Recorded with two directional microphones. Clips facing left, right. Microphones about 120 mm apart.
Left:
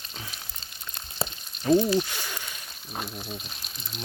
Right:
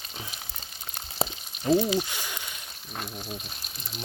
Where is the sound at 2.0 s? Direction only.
15° right (ahead or behind).